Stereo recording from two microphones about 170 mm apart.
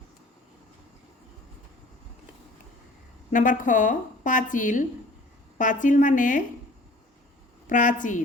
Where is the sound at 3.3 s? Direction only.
50° left (ahead or behind).